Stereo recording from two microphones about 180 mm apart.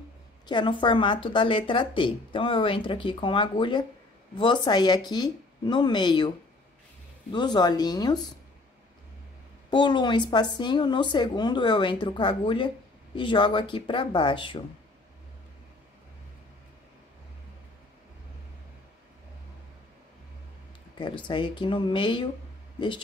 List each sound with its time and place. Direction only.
0.5 s a woman's voice: 25° left (ahead or behind)
7.3 s a woman's voice: 25° left (ahead or behind)
9.7 s a woman's voice: 25° left (ahead or behind)
21.3 s a woman's voice: 25° left (ahead or behind)